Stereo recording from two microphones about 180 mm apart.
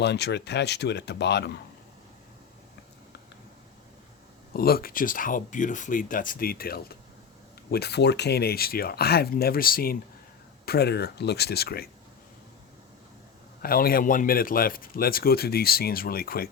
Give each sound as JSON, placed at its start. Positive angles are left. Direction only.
{"t": 0.0, "sound": "speech", "side_deg": 70}
{"t": 4.5, "sound": "a man's voice", "side_deg": 55}
{"t": 13.6, "sound": "a man's voice", "side_deg": 55}